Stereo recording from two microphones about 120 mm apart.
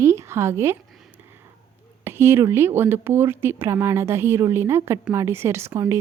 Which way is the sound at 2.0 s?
20° right (ahead or behind).